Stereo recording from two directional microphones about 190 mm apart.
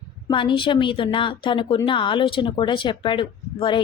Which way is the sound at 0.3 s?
25° left (ahead or behind).